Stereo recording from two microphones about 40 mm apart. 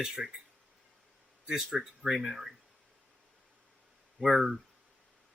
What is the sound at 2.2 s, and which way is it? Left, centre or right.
Speech, centre.